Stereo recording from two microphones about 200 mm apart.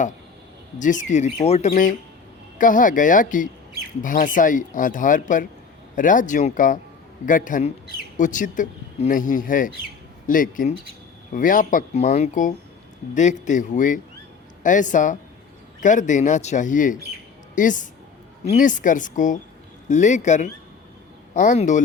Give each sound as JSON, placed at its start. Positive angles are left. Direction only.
{"t": 0.8, "sound": "speech", "side_deg": 40}